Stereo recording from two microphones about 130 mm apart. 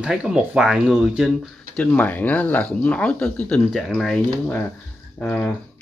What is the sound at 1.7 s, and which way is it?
Speech, 10° left (ahead or behind).